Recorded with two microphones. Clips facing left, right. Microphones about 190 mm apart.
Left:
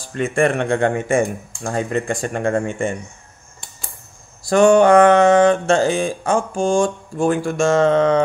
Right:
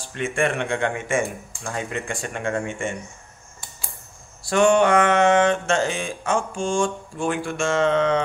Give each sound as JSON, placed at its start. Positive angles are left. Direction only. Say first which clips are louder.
{"t": 0.0, "sound": "mantra", "louder": "left 6 dB", "side_deg": 40}
{"t": 4.5, "sound": "mantra", "louder": "left 6 dB", "side_deg": 40}